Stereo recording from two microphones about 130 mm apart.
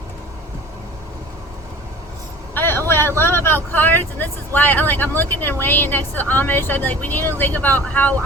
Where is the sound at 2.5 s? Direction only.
15° left (ahead or behind).